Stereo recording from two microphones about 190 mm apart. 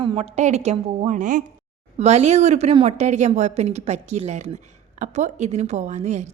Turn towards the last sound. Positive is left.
turn(degrees=-35)  # may be behind; listen again after turning